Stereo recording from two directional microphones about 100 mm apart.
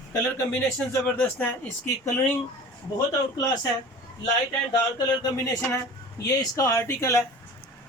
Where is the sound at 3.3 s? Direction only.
45° left (ahead or behind).